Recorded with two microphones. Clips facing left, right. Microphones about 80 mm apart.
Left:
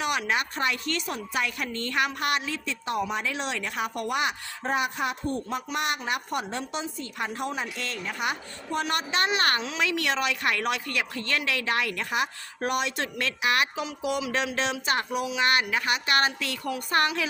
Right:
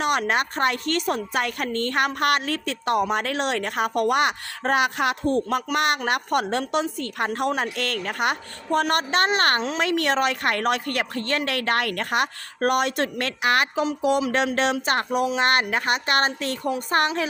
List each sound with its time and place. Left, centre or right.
0.0 s a woman's voice: right